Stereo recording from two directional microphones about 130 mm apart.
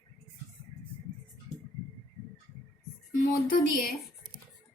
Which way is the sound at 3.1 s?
90° left.